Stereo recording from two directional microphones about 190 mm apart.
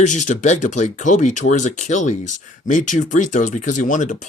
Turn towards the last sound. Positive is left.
turn(degrees=40)  # may be behind; listen again after turning